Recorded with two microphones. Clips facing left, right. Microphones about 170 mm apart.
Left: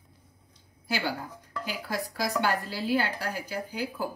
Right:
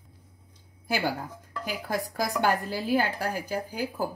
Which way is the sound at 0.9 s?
50° right (ahead or behind).